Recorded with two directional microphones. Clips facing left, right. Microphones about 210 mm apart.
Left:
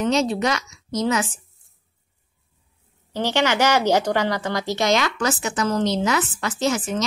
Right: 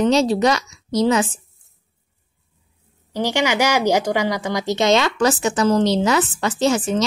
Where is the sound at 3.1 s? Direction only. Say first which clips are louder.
Right 1 dB; 10° right (ahead or behind).